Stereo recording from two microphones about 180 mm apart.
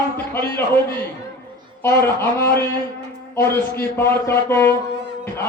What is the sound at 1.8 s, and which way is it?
Mantra, 15° left (ahead or behind).